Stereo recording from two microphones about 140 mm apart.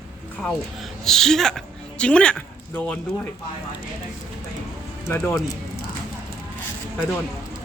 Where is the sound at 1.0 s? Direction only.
5° left (ahead or behind).